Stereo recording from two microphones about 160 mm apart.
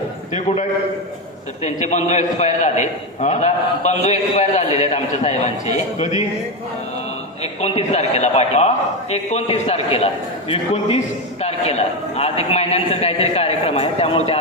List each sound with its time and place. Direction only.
0.3 s a man's voice: 50° left (ahead or behind)
7.4 s a man's voice: 40° left (ahead or behind)